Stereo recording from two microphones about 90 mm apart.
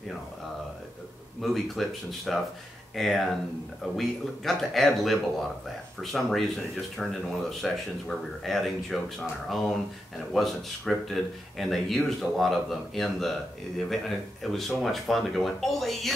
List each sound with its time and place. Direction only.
1.4 s speech: centre (ahead or behind)